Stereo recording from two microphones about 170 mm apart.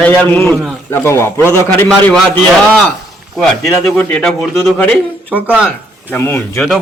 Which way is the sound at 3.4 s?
Centre (ahead or behind).